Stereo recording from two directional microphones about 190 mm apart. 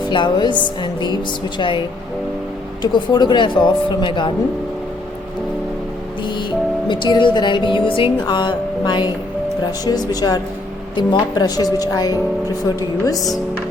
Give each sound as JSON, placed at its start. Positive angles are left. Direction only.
{"t": 0.0, "sound": "speech", "side_deg": 25}
{"t": 2.8, "sound": "speech", "side_deg": 20}
{"t": 6.8, "sound": "speech", "side_deg": 25}